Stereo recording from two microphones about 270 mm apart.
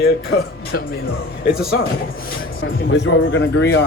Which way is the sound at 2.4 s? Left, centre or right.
Left.